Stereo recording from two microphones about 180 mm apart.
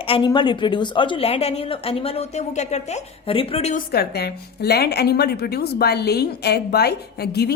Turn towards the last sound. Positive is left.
turn(degrees=65)  # may be behind; listen again after turning